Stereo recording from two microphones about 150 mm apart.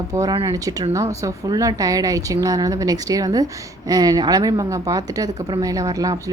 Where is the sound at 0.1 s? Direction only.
25° right (ahead or behind).